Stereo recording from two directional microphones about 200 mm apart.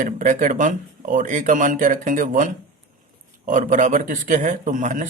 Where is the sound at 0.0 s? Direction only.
40° right (ahead or behind).